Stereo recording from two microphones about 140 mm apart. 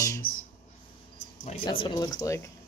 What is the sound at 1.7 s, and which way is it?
Speech, 35° left (ahead or behind).